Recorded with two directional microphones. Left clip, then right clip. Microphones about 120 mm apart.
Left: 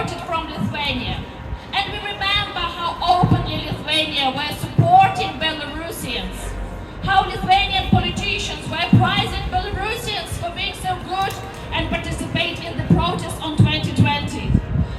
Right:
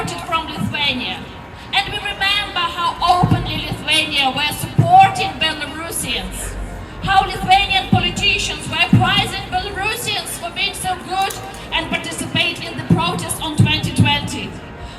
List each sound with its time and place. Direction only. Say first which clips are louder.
0.0 s a sound: right 3 dB; 15° right (ahead or behind)
7.0 s a woman's voice: right 2 dB; 15° right (ahead or behind)
10.6 s a woman's voice: right 5 dB; 10° right (ahead or behind)
11.7 s music: right 3 dB; 15° right (ahead or behind)